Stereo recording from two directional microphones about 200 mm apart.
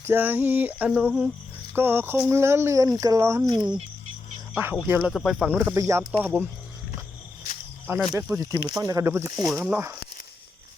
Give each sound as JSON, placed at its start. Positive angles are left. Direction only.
{"t": 0.0, "sound": "speech", "side_deg": -10}
{"t": 4.5, "sound": "speech", "side_deg": -10}
{"t": 7.9, "sound": "speech", "side_deg": -5}
{"t": 8.3, "sound": "speech", "side_deg": -15}